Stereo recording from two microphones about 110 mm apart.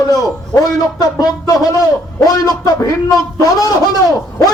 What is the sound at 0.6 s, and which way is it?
A man's voice, 35° left (ahead or behind).